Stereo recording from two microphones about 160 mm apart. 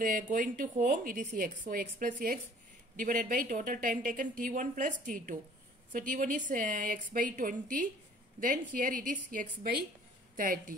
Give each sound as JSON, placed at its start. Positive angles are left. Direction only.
{"t": 0.0, "sound": "a woman's voice", "side_deg": -55}